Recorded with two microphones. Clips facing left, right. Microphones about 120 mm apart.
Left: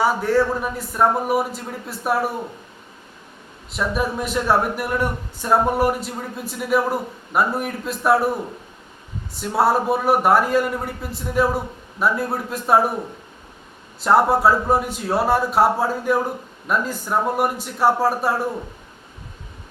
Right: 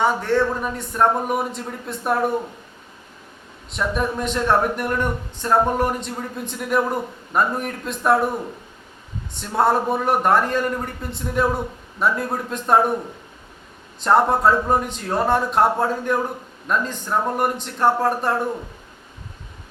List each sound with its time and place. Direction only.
0.0 s speech: 5° left (ahead or behind)
3.7 s speech: 5° left (ahead or behind)
9.3 s speech: 5° left (ahead or behind)
14.0 s speech: 5° left (ahead or behind)